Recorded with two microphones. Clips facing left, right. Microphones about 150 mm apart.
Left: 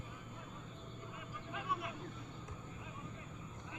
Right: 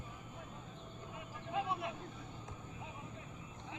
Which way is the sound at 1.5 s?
25° right (ahead or behind).